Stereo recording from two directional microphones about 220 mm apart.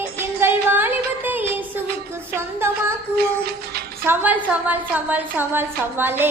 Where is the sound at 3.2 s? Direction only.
45° right (ahead or behind).